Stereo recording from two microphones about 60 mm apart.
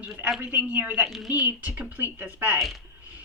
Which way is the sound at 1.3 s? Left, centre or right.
Right.